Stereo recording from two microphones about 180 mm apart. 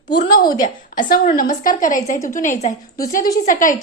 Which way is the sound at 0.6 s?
50° left (ahead or behind).